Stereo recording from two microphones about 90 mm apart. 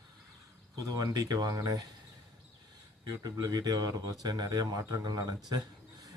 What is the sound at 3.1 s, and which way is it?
Speech, 45° right (ahead or behind).